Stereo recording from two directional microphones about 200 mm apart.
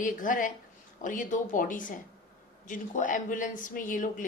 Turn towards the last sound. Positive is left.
turn(degrees=40)  # may be behind; listen again after turning